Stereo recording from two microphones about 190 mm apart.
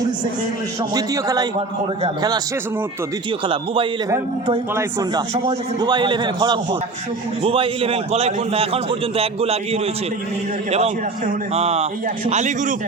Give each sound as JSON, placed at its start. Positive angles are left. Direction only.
{"t": 0.8, "sound": "a man's voice", "side_deg": -20}
{"t": 3.4, "sound": "a man's voice", "side_deg": -25}